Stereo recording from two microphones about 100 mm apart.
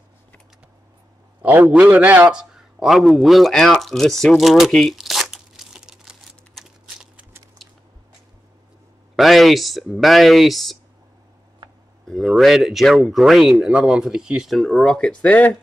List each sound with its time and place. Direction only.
1.4 s a man's voice: 15° right (ahead or behind)
2.2 s a sound: 5° right (ahead or behind)
9.1 s speech: centre (ahead or behind)
12.1 s speech: centre (ahead or behind)